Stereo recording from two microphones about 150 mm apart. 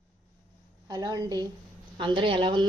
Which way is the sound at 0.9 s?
25° right (ahead or behind).